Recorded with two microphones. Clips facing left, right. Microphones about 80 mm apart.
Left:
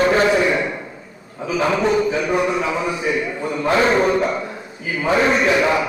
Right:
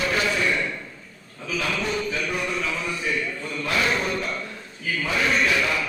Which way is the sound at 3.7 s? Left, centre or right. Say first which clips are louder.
Left 9 dB; left.